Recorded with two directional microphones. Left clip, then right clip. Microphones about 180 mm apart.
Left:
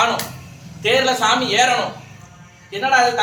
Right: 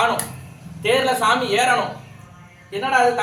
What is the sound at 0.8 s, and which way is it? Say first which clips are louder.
Speech: left 2 dB; 20° right (ahead or behind).